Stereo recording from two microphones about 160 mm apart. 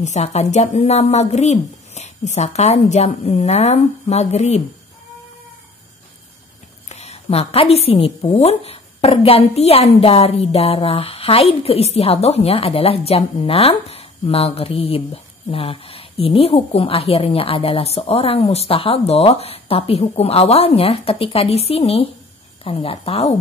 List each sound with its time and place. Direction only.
0.0 s a woman's voice: 45° left (ahead or behind)
6.9 s a woman's voice: 45° left (ahead or behind)